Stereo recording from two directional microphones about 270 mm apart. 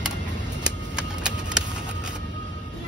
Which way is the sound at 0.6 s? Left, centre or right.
Centre.